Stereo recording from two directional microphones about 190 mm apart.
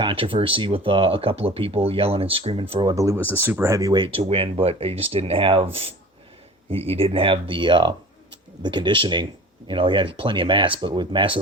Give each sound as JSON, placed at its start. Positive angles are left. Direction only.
{"t": 0.0, "sound": "speech", "side_deg": -25}
{"t": 2.9, "sound": "speech", "side_deg": -15}
{"t": 3.2, "sound": "speech", "side_deg": 10}
{"t": 3.4, "sound": "speech", "side_deg": -10}
{"t": 6.7, "sound": "speech", "side_deg": -30}